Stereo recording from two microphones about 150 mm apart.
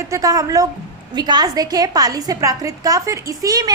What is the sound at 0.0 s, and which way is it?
A woman's voice, 20° right (ahead or behind).